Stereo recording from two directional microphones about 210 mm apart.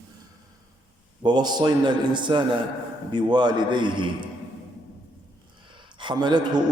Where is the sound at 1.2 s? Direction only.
20° right (ahead or behind).